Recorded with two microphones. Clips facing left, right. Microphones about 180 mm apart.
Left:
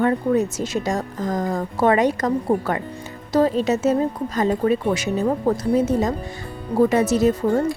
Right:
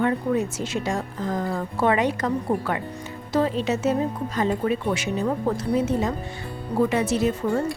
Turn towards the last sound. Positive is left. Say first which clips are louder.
# left 5 dB
turn(degrees=40)  # may be behind; listen again after turning